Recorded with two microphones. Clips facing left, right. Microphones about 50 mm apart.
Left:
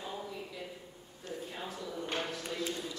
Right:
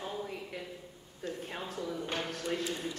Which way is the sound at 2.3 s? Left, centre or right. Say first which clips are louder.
Right 3 dB; right.